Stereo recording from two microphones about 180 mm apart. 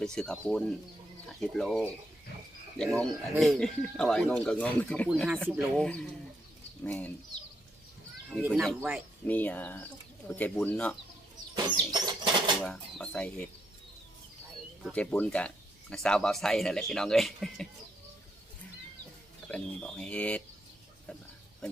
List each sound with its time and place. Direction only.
0.0 s speech: 5° left (ahead or behind)
5.0 s speech: centre (ahead or behind)
8.3 s speech: 5° right (ahead or behind)
9.2 s speech: 10° left (ahead or behind)
11.9 s bird flight: 25° right (ahead or behind)
12.6 s speech: 5° left (ahead or behind)
14.8 s speech: 5° left (ahead or behind)
19.5 s speech: 5° left (ahead or behind)